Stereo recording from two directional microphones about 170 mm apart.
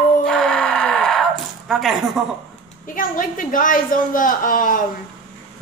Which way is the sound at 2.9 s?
50° left (ahead or behind).